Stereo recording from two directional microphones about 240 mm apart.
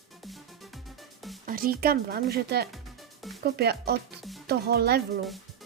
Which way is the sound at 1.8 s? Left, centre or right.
Right.